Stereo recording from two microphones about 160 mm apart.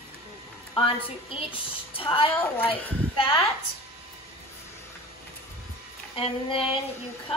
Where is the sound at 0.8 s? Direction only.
35° left (ahead or behind).